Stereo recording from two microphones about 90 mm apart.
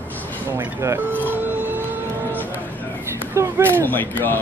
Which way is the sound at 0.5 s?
30° right (ahead or behind).